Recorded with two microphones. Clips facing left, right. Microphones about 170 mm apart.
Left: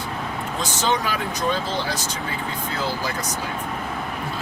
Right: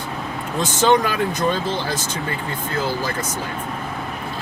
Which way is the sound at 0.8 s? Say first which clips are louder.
Right 7 dB; 55° right (ahead or behind).